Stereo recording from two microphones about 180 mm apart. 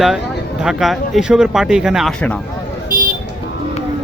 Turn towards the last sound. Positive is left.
turn(degrees=-55)  # may be behind; listen again after turning